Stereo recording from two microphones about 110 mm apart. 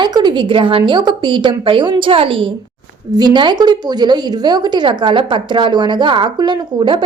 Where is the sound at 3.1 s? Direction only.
40° right (ahead or behind).